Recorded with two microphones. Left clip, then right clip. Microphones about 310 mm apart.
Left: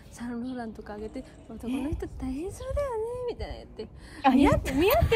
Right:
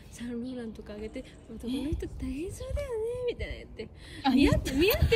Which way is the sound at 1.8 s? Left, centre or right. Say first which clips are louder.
Left 2 dB; centre.